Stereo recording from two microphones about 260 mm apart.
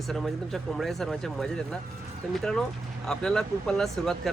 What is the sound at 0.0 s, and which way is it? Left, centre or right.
Speech, centre.